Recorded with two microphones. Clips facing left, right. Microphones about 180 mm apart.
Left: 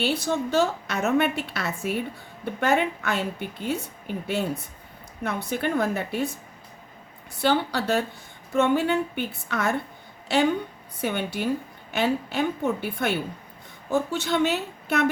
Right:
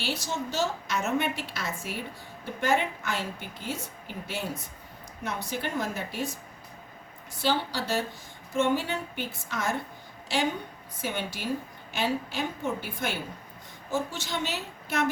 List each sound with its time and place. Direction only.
0.0 s a woman's voice: 60° left (ahead or behind)
7.3 s a woman's voice: 60° left (ahead or behind)
11.0 s a woman's voice: 60° left (ahead or behind)